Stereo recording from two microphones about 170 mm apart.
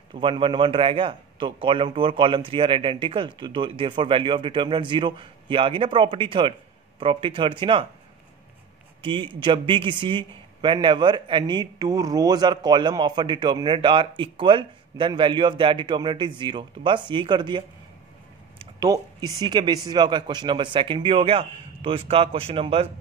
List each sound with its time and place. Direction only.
0.1 s a man's voice: 30° right (ahead or behind)
9.0 s a man's voice: 30° right (ahead or behind)